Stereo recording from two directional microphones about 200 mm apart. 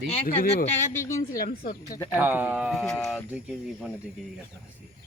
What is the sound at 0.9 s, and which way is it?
Speech, 15° left (ahead or behind).